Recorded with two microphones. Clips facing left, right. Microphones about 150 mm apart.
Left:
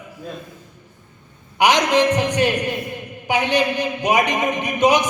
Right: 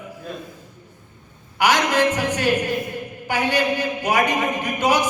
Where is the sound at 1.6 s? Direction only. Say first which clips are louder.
Left 2 dB; 20° left (ahead or behind).